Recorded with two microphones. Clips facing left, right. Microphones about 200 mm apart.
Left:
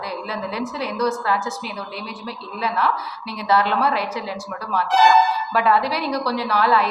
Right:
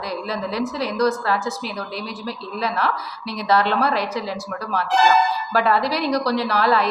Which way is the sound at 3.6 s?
10° left (ahead or behind).